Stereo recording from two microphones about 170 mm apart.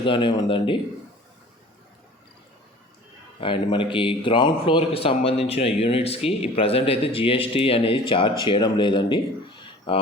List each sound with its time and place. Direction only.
0.0 s speech: 30° left (ahead or behind)
3.4 s speech: 30° left (ahead or behind)